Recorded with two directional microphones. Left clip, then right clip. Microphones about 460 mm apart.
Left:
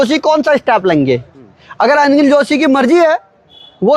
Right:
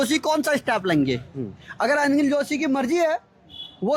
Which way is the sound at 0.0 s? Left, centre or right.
Centre.